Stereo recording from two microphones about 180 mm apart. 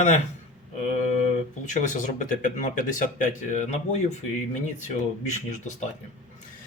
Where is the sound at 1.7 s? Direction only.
45° left (ahead or behind).